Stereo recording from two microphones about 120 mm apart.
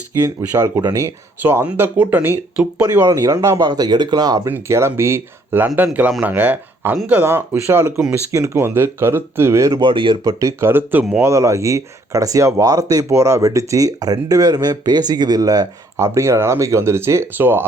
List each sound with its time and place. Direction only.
0.2 s speech: 30° right (ahead or behind)
3.0 s speech: 30° right (ahead or behind)
4.4 s speech: 20° right (ahead or behind)
9.8 s speech: 45° right (ahead or behind)
10.2 s speech: 25° right (ahead or behind)